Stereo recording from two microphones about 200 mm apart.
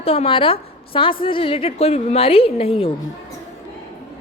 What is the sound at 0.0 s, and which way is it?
A woman's voice, 30° left (ahead or behind).